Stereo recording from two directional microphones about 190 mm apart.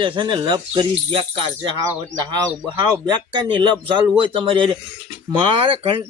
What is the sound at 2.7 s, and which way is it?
Speech, 25° right (ahead or behind).